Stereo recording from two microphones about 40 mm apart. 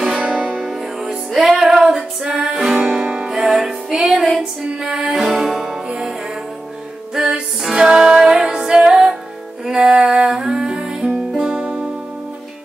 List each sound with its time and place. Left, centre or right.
0.2 s music: right
0.6 s music: centre
3.4 s music: centre
7.2 s music: centre